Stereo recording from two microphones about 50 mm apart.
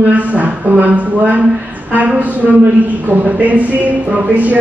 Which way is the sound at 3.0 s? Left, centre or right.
Right.